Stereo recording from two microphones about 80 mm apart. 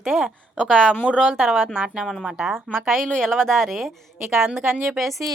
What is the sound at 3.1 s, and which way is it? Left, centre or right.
A woman's voice, centre.